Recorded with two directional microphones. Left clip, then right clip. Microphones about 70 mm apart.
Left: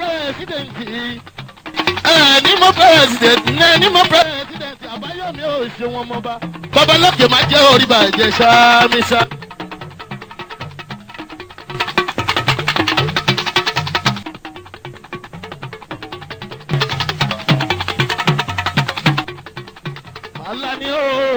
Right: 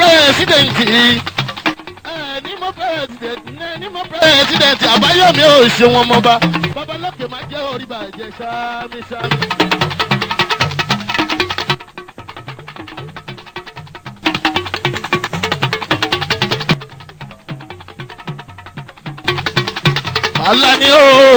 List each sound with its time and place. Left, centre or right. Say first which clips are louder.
0.0 s speech: right 13 dB; right
1.8 s music: left 16 dB; left
4.3 s speech: right 15 dB; right
6.7 s music: left 13 dB; left
9.3 s music: right 15 dB; right
11.9 s music: left 15 dB; left
14.3 s music: right 16 dB; right
19.3 s music: right 15 dB; right